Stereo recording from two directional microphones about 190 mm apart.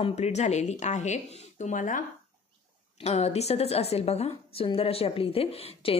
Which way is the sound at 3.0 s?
35° left (ahead or behind).